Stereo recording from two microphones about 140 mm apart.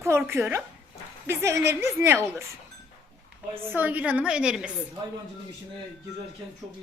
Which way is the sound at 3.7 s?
10° right (ahead or behind).